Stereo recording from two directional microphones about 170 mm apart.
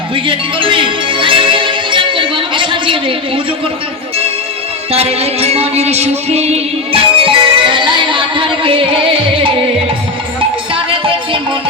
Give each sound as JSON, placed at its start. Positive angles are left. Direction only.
{"t": 0.3, "sound": "music", "side_deg": -30}
{"t": 4.9, "sound": "music", "side_deg": -35}
{"t": 10.8, "sound": "music", "side_deg": -30}